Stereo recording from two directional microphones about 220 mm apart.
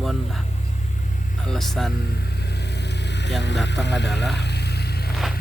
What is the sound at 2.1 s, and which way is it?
Vehicle, 45° left (ahead or behind).